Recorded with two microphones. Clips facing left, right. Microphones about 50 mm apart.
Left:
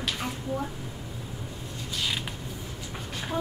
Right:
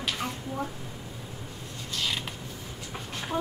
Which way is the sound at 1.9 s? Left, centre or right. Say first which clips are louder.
Even; centre.